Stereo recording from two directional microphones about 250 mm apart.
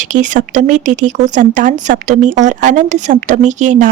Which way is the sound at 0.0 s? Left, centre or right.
Right.